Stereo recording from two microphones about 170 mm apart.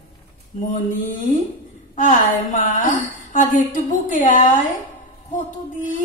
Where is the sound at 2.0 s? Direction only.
50° left (ahead or behind).